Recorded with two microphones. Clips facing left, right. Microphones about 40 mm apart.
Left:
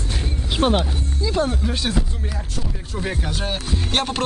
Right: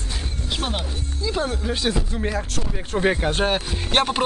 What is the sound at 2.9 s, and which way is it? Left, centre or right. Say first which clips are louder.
Speech: right 7 dB; right.